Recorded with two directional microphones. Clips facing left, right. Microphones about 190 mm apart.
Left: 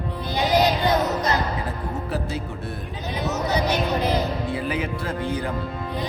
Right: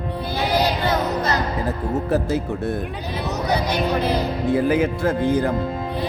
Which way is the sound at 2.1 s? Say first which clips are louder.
Right 7 dB; 45° right (ahead or behind).